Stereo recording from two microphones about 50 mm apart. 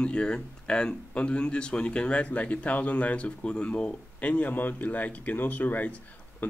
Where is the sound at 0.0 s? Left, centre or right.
Left.